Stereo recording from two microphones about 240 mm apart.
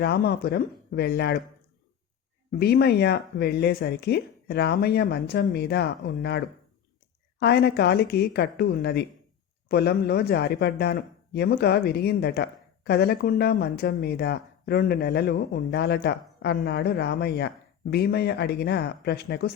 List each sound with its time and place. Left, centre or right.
0.0 s speech: left
2.6 s speech: left